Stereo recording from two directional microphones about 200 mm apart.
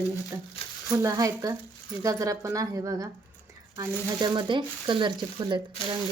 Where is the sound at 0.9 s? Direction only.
15° right (ahead or behind).